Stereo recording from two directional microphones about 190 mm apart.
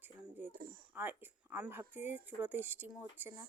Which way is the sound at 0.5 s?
50° right (ahead or behind).